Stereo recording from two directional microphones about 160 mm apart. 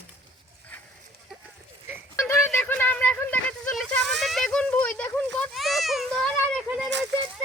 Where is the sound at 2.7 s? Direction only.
10° left (ahead or behind).